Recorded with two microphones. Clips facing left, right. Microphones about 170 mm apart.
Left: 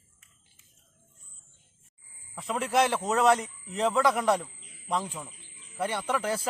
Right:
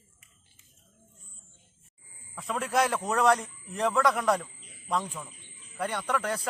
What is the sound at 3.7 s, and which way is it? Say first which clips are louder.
Speech: left 1 dB; 20° left (ahead or behind).